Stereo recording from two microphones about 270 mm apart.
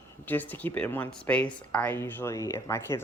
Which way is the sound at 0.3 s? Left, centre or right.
Centre.